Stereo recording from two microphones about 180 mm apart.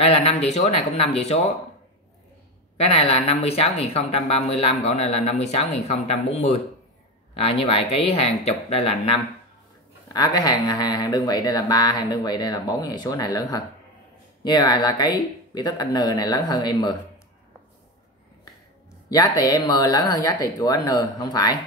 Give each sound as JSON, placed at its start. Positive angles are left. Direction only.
{"t": 0.0, "sound": "speech", "side_deg": 35}
{"t": 2.8, "sound": "speech", "side_deg": 35}
{"t": 10.0, "sound": "speech", "side_deg": 20}
{"t": 19.0, "sound": "speech", "side_deg": 20}